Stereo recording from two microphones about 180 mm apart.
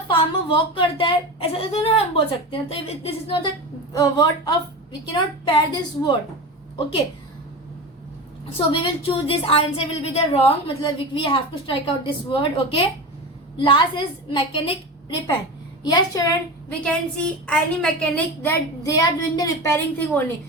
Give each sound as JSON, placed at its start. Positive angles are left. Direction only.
{"t": 0.1, "sound": "a woman's voice", "side_deg": 25}
{"t": 8.6, "sound": "speech", "side_deg": 30}
{"t": 15.8, "sound": "speech", "side_deg": 25}
{"t": 16.8, "sound": "a woman's voice", "side_deg": 5}
{"t": 18.9, "sound": "a woman's voice", "side_deg": 20}